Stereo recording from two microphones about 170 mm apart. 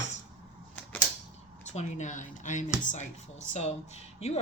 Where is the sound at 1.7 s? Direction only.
45° left (ahead or behind).